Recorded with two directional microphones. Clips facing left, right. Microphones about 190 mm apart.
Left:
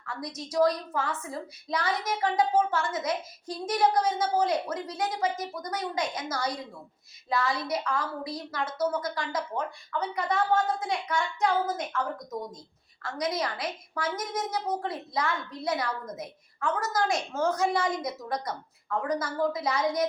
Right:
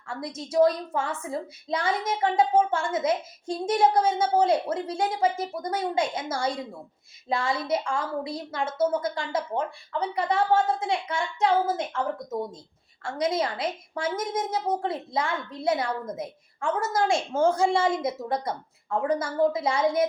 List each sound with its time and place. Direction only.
0.0 s a woman's voice: 25° right (ahead or behind)